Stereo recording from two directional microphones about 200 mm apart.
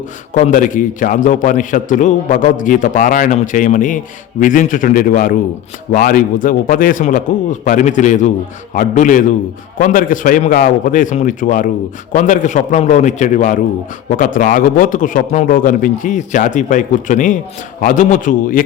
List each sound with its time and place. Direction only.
0.3 s a man's voice: 40° left (ahead or behind)